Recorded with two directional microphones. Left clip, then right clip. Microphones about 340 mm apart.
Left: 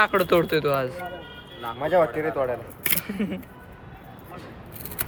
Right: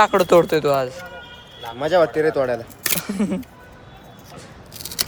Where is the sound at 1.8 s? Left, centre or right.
Right.